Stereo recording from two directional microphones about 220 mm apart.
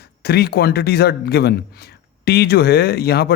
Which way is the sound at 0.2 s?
45° left (ahead or behind).